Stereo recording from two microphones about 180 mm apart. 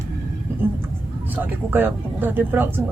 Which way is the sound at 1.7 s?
10° right (ahead or behind).